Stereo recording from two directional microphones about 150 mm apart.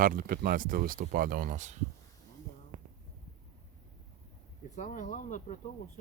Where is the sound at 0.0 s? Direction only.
70° right (ahead or behind).